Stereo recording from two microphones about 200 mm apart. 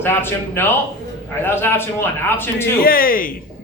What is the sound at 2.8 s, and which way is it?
Speech, 45° left (ahead or behind).